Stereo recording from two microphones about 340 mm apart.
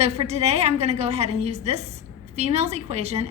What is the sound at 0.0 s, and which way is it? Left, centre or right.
A woman's voice, centre.